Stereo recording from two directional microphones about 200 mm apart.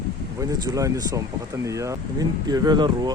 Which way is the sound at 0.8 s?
15° right (ahead or behind).